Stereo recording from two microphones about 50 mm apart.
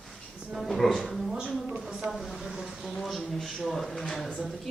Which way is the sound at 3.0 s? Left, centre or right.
Centre.